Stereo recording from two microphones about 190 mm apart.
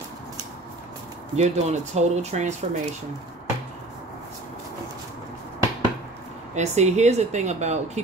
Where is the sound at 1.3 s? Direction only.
35° right (ahead or behind).